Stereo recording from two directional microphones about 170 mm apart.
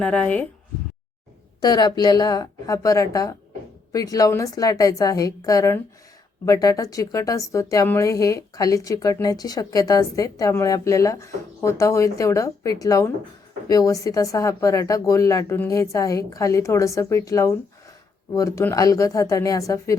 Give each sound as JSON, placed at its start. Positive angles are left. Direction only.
{"t": 0.0, "sound": "speech", "side_deg": 10}
{"t": 1.6, "sound": "a woman's voice", "side_deg": 25}